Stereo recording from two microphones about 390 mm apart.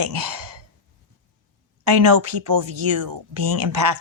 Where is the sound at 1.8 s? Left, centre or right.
Right.